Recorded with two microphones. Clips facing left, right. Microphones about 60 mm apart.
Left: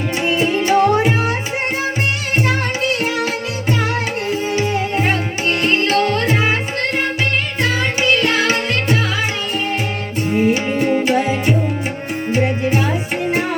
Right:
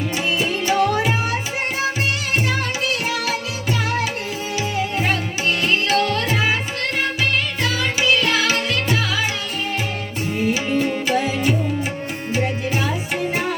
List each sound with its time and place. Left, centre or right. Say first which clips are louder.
0.3 s tabla: left 6 dB; left
4.5 s music: left 1 dB; left
7.6 s music: left 5 dB; left
10.2 s music: left 5 dB; left
11.0 s music: left 3 dB; left